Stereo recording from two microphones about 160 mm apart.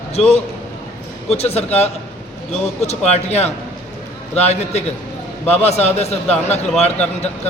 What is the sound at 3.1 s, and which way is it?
A man's voice, 40° left (ahead or behind).